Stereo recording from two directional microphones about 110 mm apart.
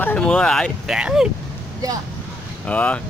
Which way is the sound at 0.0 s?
10° left (ahead or behind).